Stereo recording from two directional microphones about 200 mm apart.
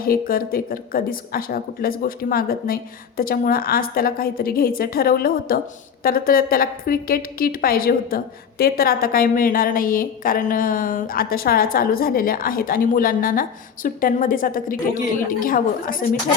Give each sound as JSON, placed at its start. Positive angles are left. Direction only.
{"t": 0.0, "sound": "a woman's voice", "side_deg": 45}